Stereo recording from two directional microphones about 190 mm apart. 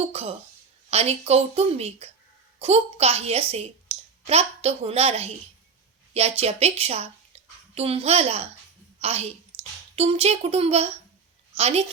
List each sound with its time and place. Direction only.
0.1 s a woman's voice: 30° right (ahead or behind)